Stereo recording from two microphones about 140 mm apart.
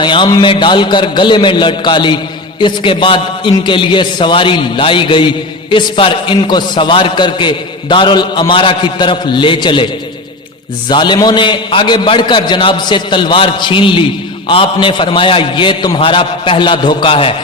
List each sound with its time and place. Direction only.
0.0 s a man's voice: 35° left (ahead or behind)
10.8 s a man's voice: 35° left (ahead or behind)